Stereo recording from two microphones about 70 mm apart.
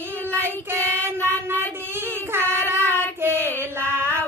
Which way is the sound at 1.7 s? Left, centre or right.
Right.